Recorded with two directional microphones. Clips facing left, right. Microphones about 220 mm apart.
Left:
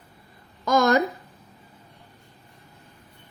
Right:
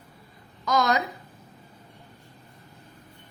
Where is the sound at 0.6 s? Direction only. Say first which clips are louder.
Left 5 dB; 50° left (ahead or behind).